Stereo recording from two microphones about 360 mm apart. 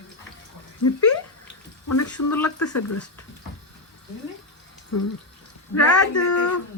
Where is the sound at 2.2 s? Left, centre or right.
Left.